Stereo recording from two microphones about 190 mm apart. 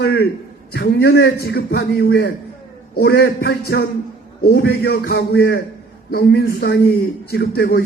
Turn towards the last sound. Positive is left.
turn(degrees=55)  # may be behind; listen again after turning